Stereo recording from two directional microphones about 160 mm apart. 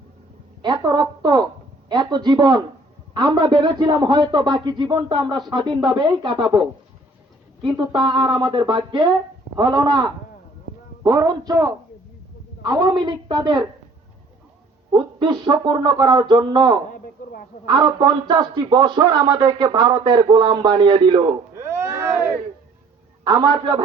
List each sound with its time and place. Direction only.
0.6 s speech: 30° right (ahead or behind)
7.7 s speech: 30° right (ahead or behind)
14.9 s speech: 30° right (ahead or behind)
21.5 s speech: 15° right (ahead or behind)
23.2 s speech: 25° right (ahead or behind)